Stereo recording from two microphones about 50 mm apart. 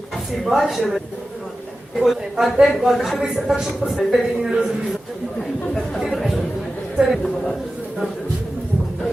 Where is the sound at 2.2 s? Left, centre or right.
Centre.